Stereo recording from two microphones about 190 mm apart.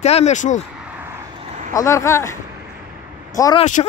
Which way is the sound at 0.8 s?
10° right (ahead or behind).